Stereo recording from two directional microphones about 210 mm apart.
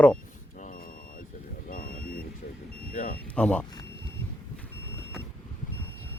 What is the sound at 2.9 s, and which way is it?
Smoke detector, 40° left (ahead or behind).